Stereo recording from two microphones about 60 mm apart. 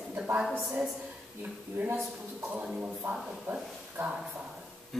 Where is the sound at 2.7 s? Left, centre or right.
Right.